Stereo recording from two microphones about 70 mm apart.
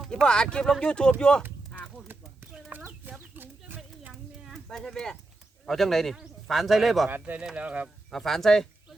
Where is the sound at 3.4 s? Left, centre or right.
Right.